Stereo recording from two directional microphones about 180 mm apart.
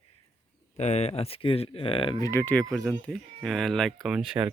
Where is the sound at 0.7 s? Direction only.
40° left (ahead or behind).